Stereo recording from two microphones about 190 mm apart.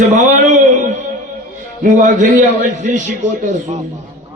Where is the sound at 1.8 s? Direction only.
40° right (ahead or behind).